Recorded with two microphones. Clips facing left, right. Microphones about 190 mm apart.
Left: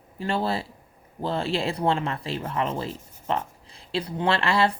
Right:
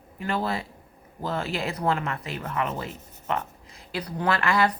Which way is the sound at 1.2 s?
30° left (ahead or behind).